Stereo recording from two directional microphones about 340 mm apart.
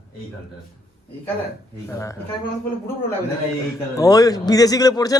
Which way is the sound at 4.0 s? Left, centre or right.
Centre.